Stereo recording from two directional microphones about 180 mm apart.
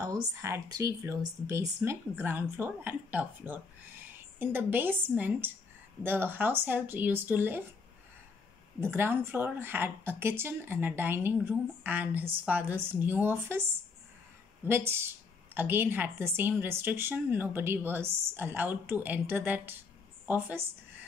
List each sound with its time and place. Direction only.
0.0 s a woman's voice: 15° right (ahead or behind)
8.8 s a woman's voice: 15° right (ahead or behind)